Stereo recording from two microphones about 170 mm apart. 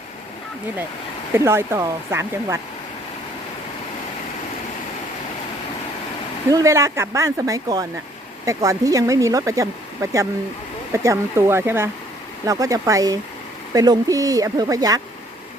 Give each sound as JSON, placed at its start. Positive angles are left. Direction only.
{"t": 1.3, "sound": "speech", "side_deg": -15}
{"t": 6.5, "sound": "speech", "side_deg": -20}